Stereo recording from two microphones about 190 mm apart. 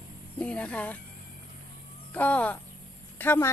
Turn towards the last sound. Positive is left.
turn(degrees=10)  # may be behind; listen again after turning